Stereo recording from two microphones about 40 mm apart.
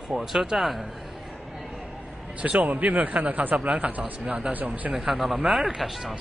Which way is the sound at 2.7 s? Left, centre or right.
Right.